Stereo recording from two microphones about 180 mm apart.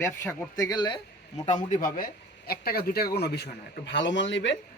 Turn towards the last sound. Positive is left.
turn(degrees=90)